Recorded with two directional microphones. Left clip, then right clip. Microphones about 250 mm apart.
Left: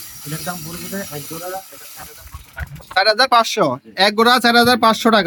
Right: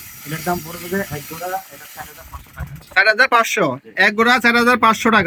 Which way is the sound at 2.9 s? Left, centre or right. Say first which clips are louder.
Even; centre.